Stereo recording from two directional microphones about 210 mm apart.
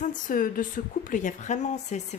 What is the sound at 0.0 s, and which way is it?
A woman's voice, 40° left (ahead or behind).